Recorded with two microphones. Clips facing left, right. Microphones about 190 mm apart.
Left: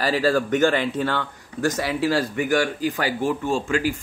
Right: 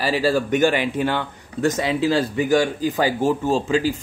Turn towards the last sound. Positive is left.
turn(degrees=-40)  # may be behind; listen again after turning